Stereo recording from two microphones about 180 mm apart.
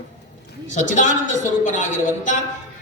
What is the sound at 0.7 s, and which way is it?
A woman's voice, 45° left (ahead or behind).